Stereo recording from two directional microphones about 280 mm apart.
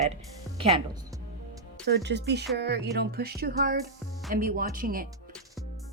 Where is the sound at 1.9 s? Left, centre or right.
Right.